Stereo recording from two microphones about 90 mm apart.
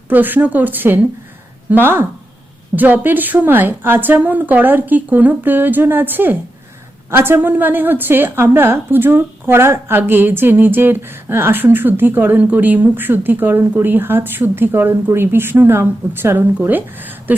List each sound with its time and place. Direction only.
0.1 s a woman's voice: 20° right (ahead or behind)